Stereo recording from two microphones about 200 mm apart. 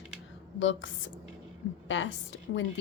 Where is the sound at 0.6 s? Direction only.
70° left (ahead or behind).